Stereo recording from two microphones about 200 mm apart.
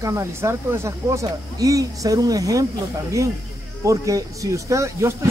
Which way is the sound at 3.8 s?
15° right (ahead or behind).